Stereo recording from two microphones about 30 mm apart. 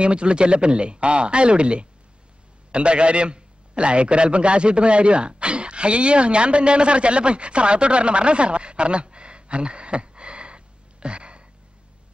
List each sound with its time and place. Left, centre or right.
0.0 s a man's voice: right